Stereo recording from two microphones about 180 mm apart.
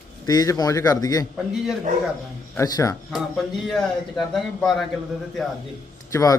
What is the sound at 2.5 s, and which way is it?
Speech, 20° left (ahead or behind).